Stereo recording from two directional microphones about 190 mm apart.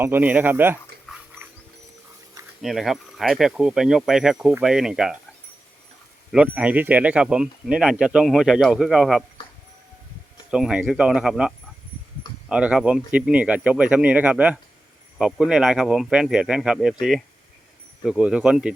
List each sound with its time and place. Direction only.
0.0 s speech: 10° right (ahead or behind)
2.6 s speech: centre (ahead or behind)
6.3 s speech: 5° right (ahead or behind)
10.5 s speech: 5° right (ahead or behind)